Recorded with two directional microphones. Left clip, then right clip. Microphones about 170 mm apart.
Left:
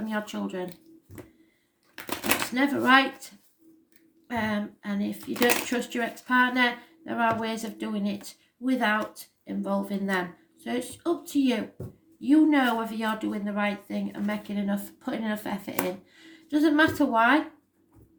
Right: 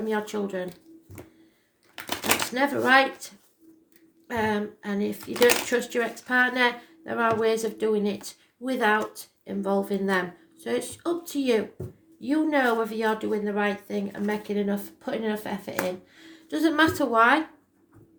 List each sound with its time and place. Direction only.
0.1 s speech: 35° right (ahead or behind)
2.0 s typewriter: 15° right (ahead or behind)
2.6 s speech: 40° right (ahead or behind)